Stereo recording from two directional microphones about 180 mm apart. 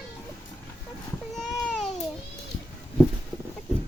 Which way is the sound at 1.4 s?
Centre (ahead or behind).